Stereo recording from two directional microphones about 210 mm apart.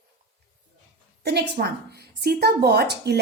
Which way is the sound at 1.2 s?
50° right (ahead or behind).